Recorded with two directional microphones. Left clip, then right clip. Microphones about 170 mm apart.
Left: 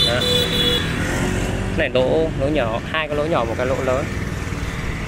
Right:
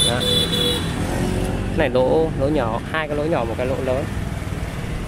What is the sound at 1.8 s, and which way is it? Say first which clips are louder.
Speech: right 1 dB; 25° right (ahead or behind).